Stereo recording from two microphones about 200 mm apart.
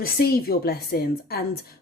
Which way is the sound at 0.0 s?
50° left (ahead or behind).